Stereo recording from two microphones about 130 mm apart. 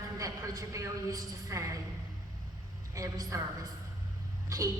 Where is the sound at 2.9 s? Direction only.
25° right (ahead or behind).